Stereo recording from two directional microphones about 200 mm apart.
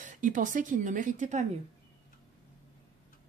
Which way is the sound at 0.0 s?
40° right (ahead or behind).